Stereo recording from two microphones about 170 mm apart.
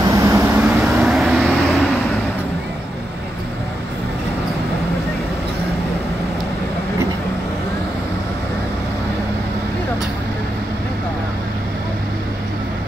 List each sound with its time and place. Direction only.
0.0 s vehicle: 20° right (ahead or behind)
0.7 s vehicle: centre (ahead or behind)